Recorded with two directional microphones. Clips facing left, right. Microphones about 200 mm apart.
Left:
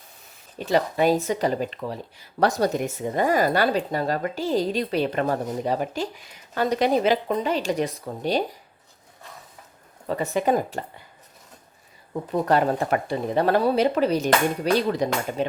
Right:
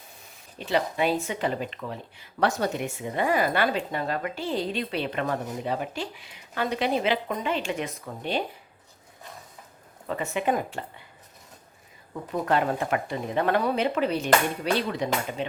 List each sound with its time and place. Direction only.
0.6 s speech: 40° left (ahead or behind)
10.1 s speech: 40° left (ahead or behind)
12.3 s speech: 40° left (ahead or behind)